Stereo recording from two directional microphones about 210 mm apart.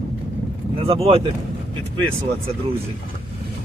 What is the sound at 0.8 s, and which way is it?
Speech, 25° right (ahead or behind).